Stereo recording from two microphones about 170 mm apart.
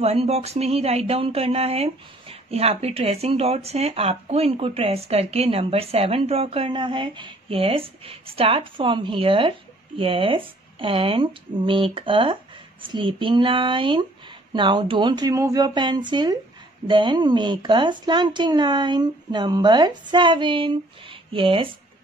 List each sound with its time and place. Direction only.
0.0 s speech: 35° right (ahead or behind)